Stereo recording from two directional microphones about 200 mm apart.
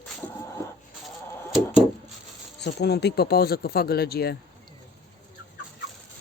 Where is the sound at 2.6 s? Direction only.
55° left (ahead or behind).